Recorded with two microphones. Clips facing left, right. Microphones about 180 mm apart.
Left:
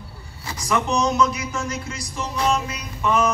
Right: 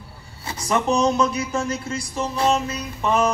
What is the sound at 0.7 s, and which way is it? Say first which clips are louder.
Mantra: right 2 dB; 35° right (ahead or behind).